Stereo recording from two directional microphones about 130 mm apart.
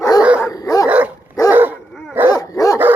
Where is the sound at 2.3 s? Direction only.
25° left (ahead or behind).